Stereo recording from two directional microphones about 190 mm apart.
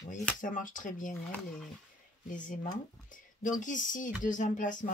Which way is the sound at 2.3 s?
45° left (ahead or behind).